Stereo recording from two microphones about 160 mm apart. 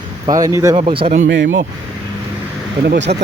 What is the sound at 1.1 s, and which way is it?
Speech, 55° right (ahead or behind).